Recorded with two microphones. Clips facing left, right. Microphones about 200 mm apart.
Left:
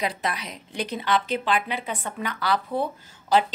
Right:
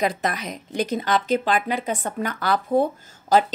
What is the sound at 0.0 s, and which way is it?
Speech, 45° right (ahead or behind).